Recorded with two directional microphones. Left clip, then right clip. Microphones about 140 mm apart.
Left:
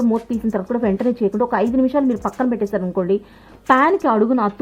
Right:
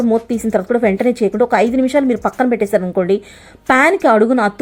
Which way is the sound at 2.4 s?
25° right (ahead or behind).